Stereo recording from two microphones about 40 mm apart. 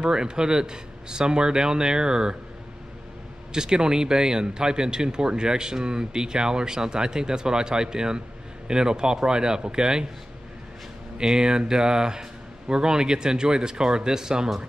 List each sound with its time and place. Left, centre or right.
0.0 s speech: centre
3.5 s speech: centre
11.1 s speech: centre